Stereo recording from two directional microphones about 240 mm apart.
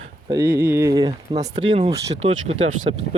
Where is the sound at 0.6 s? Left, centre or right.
Centre.